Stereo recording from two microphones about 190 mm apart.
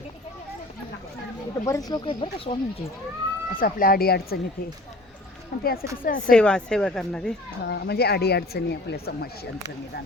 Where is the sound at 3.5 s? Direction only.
50° left (ahead or behind).